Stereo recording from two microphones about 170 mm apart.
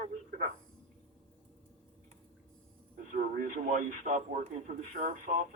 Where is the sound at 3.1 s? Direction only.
50° right (ahead or behind).